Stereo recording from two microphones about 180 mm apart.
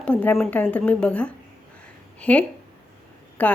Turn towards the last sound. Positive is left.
turn(degrees=10)  # may be behind; listen again after turning